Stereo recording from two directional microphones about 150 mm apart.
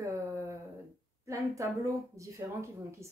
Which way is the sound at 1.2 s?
20° right (ahead or behind).